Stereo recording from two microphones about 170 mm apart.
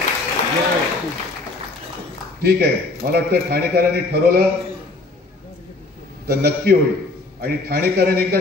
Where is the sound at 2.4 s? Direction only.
65° right (ahead or behind).